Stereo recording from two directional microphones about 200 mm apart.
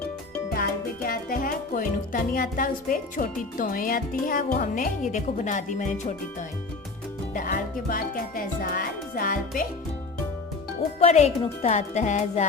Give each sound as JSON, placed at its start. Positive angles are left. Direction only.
{"t": 0.5, "sound": "speech", "side_deg": 50}
{"t": 7.3, "sound": "music", "side_deg": 45}
{"t": 11.0, "sound": "music", "side_deg": 30}